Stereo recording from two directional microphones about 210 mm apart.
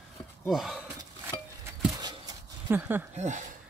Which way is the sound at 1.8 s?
20° right (ahead or behind).